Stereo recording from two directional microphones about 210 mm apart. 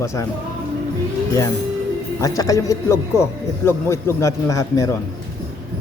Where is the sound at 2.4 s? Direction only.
15° left (ahead or behind).